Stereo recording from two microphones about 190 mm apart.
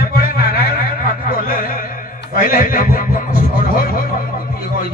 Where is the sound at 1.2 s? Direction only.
50° left (ahead or behind).